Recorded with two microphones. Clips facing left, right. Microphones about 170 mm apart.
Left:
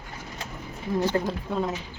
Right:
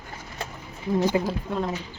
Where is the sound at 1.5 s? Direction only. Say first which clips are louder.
Even; centre (ahead or behind).